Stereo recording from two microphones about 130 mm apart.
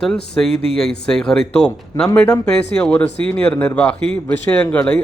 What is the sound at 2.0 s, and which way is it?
Speech, 25° left (ahead or behind).